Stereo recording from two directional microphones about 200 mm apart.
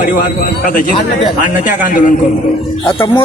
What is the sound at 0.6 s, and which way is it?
A man's voice, 45° left (ahead or behind).